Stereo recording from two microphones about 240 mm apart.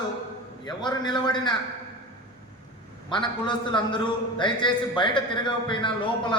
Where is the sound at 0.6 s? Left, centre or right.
Centre.